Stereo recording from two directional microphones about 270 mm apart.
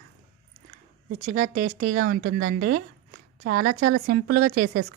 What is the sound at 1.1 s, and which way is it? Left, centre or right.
A woman's voice, right.